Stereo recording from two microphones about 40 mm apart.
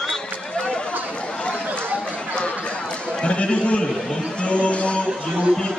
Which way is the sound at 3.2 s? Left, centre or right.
Left.